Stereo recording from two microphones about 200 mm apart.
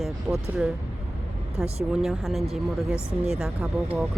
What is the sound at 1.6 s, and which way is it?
Speech, 5° right (ahead or behind).